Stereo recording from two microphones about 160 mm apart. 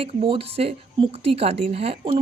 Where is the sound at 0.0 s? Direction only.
35° right (ahead or behind).